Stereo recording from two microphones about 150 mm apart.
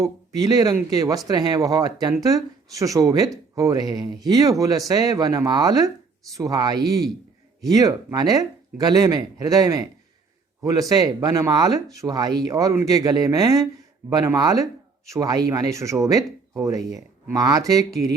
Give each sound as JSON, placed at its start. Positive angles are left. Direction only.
{"t": 0.0, "sound": "speech", "side_deg": -25}